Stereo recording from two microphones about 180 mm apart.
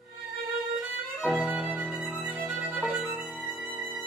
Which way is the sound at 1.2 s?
Centre (ahead or behind).